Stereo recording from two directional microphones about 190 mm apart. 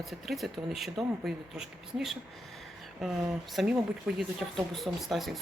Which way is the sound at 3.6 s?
Centre (ahead or behind).